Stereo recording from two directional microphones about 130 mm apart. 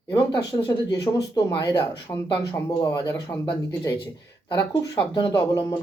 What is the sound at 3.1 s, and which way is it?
Speech, 10° left (ahead or behind).